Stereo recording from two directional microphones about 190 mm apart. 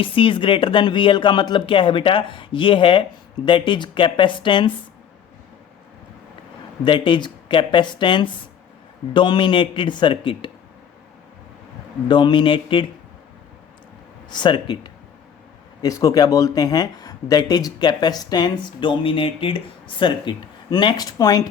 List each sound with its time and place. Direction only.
0.0 s speech: 25° left (ahead or behind)
6.8 s speech: 25° left (ahead or behind)
12.0 s speech: 25° left (ahead or behind)
14.3 s speech: 25° left (ahead or behind)